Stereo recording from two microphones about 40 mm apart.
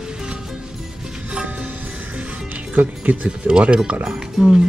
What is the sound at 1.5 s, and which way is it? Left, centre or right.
Music, right.